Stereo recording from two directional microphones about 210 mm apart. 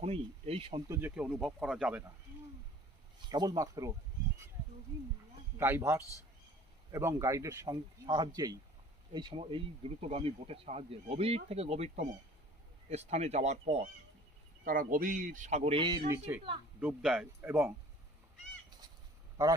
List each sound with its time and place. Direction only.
0.0 s speech: 30° right (ahead or behind)
0.9 s speech: 10° right (ahead or behind)
3.2 s speech: 20° right (ahead or behind)
5.5 s speech: 10° right (ahead or behind)